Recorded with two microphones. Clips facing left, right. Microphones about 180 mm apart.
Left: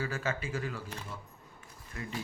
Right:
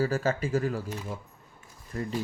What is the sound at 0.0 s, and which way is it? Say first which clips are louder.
Speech: right 8 dB; 40° right (ahead or behind).